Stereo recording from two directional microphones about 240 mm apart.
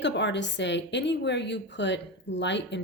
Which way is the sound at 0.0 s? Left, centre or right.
Left.